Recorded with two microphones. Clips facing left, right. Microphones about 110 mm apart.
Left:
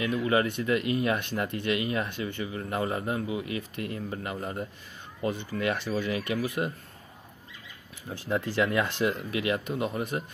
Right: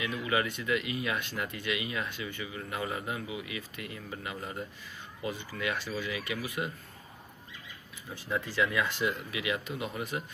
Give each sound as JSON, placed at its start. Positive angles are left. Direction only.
{"t": 0.0, "sound": "speech", "side_deg": 40}
{"t": 5.8, "sound": "speech", "side_deg": 55}
{"t": 8.5, "sound": "speech", "side_deg": 30}
{"t": 9.0, "sound": "speech", "side_deg": 40}